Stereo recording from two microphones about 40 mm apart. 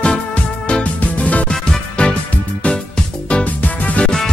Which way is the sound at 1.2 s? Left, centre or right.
Left.